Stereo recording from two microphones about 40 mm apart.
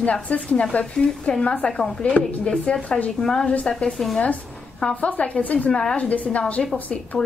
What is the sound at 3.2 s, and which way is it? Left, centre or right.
Speech, centre.